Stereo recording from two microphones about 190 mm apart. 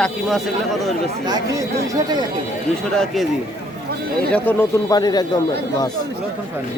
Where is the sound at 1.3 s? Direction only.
20° right (ahead or behind).